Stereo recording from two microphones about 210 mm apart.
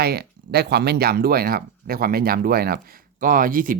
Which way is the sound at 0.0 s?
50° right (ahead or behind).